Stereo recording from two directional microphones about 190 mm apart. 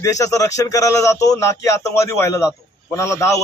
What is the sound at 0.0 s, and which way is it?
A man's voice, 15° left (ahead or behind).